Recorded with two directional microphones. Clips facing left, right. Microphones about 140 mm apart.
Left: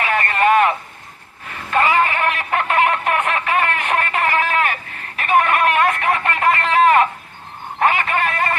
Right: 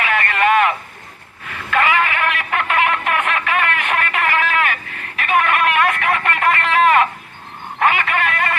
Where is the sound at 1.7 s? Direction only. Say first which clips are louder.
Left 1 dB; 30° left (ahead or behind).